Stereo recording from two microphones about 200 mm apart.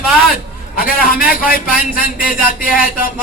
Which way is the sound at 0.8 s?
45° left (ahead or behind).